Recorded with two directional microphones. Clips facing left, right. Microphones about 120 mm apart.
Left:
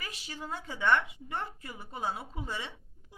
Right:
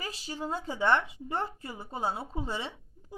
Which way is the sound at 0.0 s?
30° right (ahead or behind).